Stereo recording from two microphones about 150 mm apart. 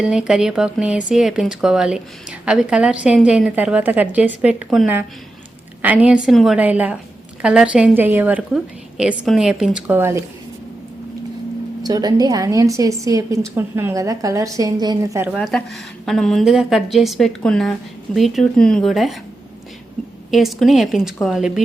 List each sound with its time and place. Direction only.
0.0 s a woman's voice: 5° right (ahead or behind)
11.8 s a woman's voice: 25° right (ahead or behind)
15.4 s a woman's voice: 5° left (ahead or behind)
20.3 s a woman's voice: centre (ahead or behind)